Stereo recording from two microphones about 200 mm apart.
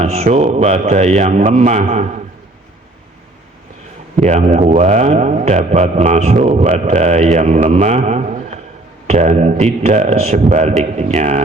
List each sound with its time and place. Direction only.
0.0 s speech: 35° right (ahead or behind)
4.3 s speech: 35° right (ahead or behind)